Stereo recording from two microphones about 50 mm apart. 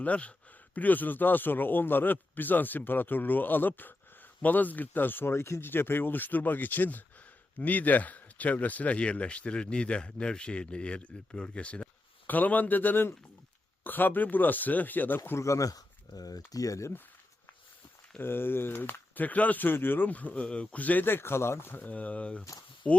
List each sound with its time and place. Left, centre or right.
0.0 s speech: left
12.3 s speech: left
15.4 s speech: left
18.2 s speech: left
21.0 s speech: left
21.8 s speech: left